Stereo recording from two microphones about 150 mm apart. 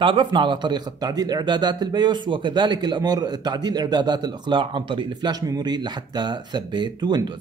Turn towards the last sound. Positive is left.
turn(degrees=-30)  # may be behind; listen again after turning